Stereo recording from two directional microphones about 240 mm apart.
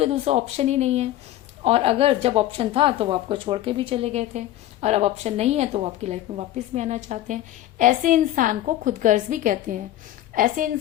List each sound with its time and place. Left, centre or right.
0.0 s a woman's voice: right